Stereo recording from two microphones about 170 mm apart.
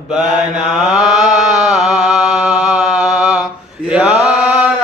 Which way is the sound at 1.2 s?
45° right (ahead or behind).